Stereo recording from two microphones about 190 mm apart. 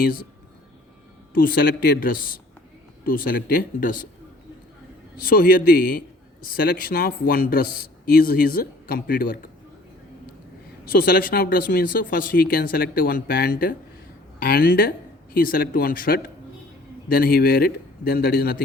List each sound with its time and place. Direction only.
0.0 s a man's voice: 50° left (ahead or behind)
1.3 s a man's voice: 50° left (ahead or behind)
5.2 s a man's voice: 50° left (ahead or behind)
10.9 s a man's voice: 50° left (ahead or behind)